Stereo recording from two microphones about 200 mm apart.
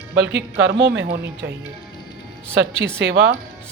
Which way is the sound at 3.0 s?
70° right (ahead or behind).